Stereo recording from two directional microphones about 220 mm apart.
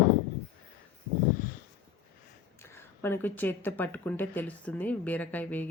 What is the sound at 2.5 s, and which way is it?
Speech, 10° left (ahead or behind).